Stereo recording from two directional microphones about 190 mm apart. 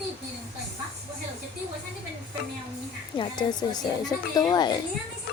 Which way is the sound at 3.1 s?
25° left (ahead or behind).